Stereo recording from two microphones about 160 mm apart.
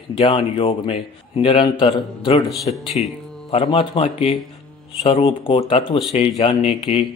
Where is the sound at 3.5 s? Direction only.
30° left (ahead or behind).